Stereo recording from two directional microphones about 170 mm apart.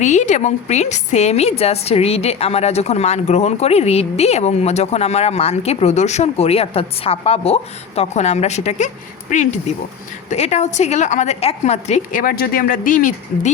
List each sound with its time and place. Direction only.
0.0 s a woman's voice: 45° left (ahead or behind)